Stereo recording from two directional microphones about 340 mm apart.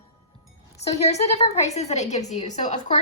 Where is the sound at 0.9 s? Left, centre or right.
Centre.